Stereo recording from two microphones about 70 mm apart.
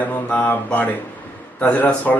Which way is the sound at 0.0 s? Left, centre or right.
Left.